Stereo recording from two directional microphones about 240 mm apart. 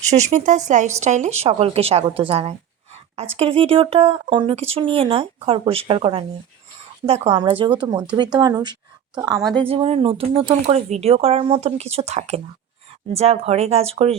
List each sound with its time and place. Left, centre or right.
0.1 s speech: right
9.4 s speech: centre
9.6 s speech: right